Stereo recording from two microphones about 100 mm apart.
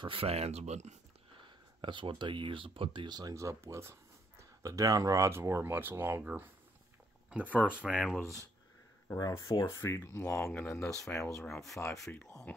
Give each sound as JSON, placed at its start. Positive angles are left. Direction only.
{"t": 0.0, "sound": "speech", "side_deg": -70}
{"t": 1.4, "sound": "speech", "side_deg": -55}
{"t": 9.7, "sound": "speech", "side_deg": 30}
{"t": 11.1, "sound": "speech", "side_deg": 30}
{"t": 11.4, "sound": "speech", "side_deg": 5}